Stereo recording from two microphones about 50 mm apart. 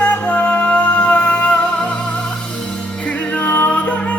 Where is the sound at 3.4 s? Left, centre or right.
Left.